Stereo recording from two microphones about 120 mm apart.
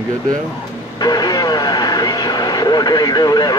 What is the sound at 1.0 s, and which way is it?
Vehicle, 35° left (ahead or behind).